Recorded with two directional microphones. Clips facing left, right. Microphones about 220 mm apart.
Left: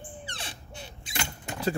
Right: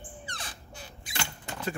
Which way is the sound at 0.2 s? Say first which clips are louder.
Left 2 dB; 30° left (ahead or behind).